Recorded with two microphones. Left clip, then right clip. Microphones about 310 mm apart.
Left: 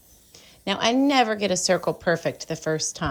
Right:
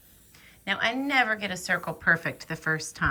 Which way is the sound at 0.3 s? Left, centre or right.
Centre.